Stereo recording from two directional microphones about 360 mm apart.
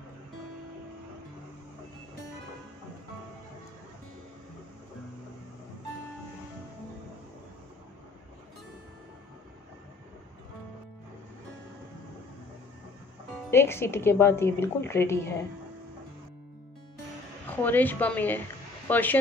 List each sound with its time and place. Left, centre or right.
13.5 s a woman's voice: centre
17.5 s speech: centre